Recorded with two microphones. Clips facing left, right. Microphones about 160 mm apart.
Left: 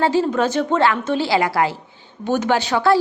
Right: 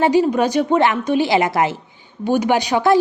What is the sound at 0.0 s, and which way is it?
Speech, 15° right (ahead or behind).